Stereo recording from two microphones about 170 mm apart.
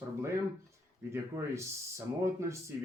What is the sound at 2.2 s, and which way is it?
Speech, 15° right (ahead or behind).